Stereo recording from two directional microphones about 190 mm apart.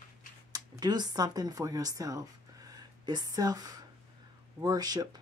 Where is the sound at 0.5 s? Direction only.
20° right (ahead or behind).